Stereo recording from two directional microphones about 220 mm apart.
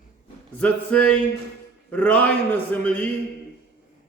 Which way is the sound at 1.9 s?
5° left (ahead or behind).